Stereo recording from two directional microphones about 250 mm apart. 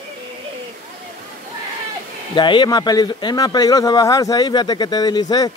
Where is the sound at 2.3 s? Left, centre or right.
Centre.